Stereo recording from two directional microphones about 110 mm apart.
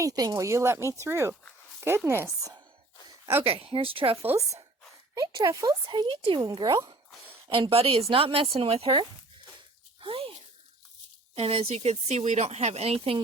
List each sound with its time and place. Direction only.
0.0 s speech: 35° right (ahead or behind)
3.4 s a woman's voice: 55° right (ahead or behind)
5.1 s speech: 35° right (ahead or behind)
5.9 s speech: 45° right (ahead or behind)
6.5 s speech: 35° right (ahead or behind)
7.5 s a woman's voice: 55° right (ahead or behind)
10.0 s a sound: 55° right (ahead or behind)
11.3 s speech: 65° right (ahead or behind)